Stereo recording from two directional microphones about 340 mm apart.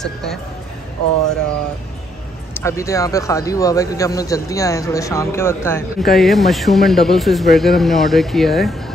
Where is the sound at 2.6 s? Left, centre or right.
Centre.